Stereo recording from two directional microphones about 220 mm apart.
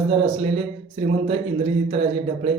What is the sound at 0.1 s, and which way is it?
Speech, 25° right (ahead or behind).